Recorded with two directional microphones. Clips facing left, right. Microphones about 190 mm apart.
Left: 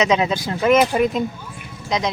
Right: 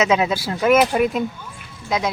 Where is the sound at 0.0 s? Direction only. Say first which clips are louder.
Even; 5° right (ahead or behind).